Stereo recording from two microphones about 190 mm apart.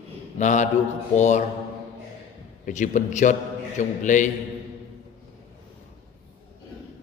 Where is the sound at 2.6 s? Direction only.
40° left (ahead or behind).